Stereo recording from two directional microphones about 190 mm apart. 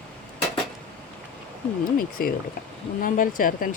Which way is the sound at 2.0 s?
50° left (ahead or behind).